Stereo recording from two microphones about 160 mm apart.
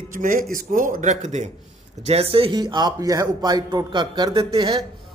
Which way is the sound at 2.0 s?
40° right (ahead or behind).